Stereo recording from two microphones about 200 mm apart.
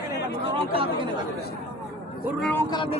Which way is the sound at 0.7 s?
25° right (ahead or behind).